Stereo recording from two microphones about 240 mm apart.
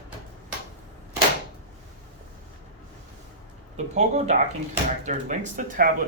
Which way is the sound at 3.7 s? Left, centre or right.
Right.